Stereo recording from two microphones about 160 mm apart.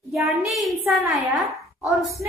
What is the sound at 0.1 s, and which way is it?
A woman's voice, centre (ahead or behind).